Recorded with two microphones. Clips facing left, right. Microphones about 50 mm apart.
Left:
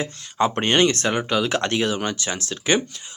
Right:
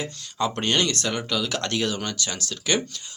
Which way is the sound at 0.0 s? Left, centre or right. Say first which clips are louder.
Left 5 dB; left.